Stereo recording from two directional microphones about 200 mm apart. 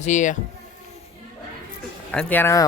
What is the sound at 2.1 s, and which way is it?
Speech, 10° left (ahead or behind).